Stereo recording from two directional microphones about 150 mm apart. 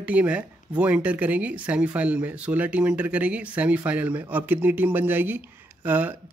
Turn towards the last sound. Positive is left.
turn(degrees=-10)  # may be behind; listen again after turning